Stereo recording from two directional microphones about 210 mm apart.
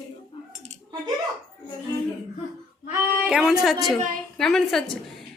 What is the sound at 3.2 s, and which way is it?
A woman's voice, 5° right (ahead or behind).